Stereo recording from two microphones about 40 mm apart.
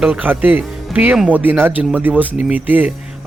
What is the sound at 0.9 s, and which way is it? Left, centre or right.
A man's voice, right.